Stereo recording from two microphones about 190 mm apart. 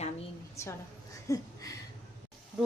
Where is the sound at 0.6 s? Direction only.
15° left (ahead or behind).